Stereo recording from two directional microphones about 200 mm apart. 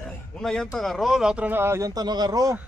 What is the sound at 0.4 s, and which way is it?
A man's voice, centre (ahead or behind).